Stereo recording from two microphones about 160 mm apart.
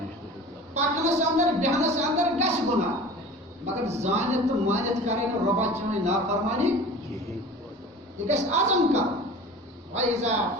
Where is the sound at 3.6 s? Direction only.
45° right (ahead or behind).